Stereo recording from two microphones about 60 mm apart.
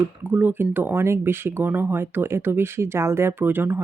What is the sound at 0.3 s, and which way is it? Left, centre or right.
Speech, right.